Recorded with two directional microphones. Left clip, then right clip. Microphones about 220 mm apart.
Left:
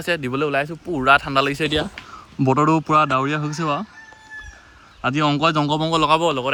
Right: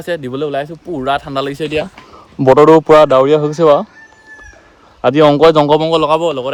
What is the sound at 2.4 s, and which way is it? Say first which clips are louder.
Speech: right 12 dB; 30° left (ahead or behind).